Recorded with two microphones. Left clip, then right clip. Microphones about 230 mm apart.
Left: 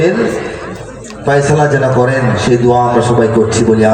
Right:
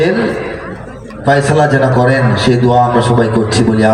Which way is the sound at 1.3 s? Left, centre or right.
Right.